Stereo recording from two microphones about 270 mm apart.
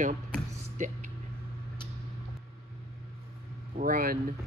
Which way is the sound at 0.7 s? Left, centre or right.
Right.